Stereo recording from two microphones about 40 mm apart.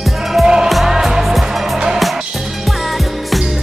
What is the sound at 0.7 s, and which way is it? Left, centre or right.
Music, centre.